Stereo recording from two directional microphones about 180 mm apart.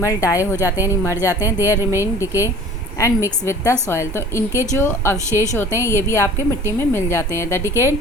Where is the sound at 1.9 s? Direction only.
15° left (ahead or behind).